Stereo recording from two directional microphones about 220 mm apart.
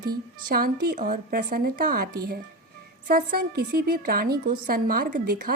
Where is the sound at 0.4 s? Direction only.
45° right (ahead or behind).